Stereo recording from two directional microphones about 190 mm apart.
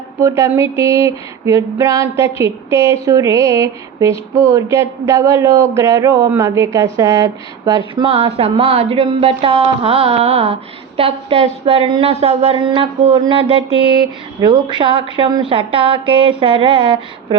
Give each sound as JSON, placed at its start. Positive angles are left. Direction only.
{"t": 0.2, "sound": "female singing", "side_deg": -15}
{"t": 7.9, "sound": "a woman's voice", "side_deg": -30}
{"t": 9.4, "sound": "a sound", "side_deg": -30}
{"t": 14.4, "sound": "a woman's voice", "side_deg": -25}